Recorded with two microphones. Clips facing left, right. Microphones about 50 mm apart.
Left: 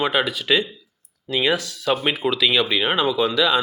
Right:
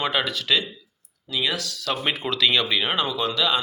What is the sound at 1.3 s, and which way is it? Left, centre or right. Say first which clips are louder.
Speech: left 5 dB; left.